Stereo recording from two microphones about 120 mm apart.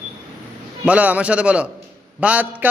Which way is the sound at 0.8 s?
10° right (ahead or behind).